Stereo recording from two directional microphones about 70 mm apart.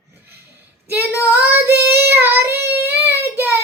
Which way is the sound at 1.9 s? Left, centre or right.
Right.